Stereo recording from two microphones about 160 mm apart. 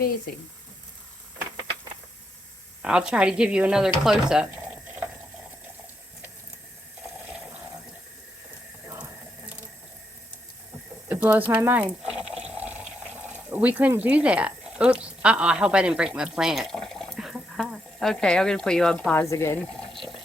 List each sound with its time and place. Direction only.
2.8 s speech: 5° right (ahead or behind)
4.0 s a sound: 5° right (ahead or behind)
11.1 s water: 10° right (ahead or behind)
19.3 s speech: 15° left (ahead or behind)
19.8 s water: centre (ahead or behind)